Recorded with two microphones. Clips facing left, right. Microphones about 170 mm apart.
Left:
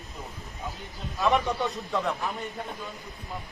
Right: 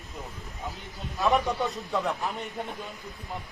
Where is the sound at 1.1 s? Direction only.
Centre (ahead or behind).